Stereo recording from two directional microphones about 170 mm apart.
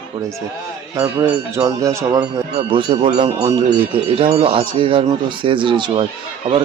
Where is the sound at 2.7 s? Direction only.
30° right (ahead or behind).